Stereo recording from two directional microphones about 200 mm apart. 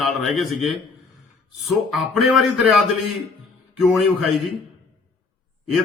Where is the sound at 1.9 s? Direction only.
Centre (ahead or behind).